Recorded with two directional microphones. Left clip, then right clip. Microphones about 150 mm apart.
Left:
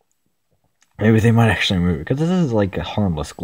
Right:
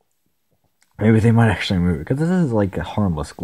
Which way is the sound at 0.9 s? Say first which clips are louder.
Left 1 dB; 10° left (ahead or behind).